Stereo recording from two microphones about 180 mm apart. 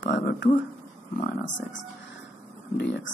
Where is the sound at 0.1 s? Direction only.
75° left (ahead or behind).